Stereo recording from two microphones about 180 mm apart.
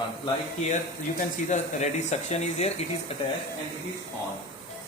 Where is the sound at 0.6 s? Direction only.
40° left (ahead or behind).